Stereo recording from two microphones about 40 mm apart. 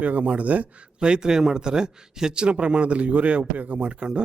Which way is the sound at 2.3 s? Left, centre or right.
Right.